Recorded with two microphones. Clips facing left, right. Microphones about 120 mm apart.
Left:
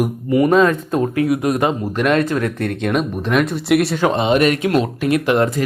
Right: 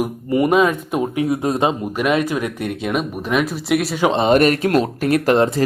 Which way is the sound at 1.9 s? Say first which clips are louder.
Left 2 dB; 5° right (ahead or behind).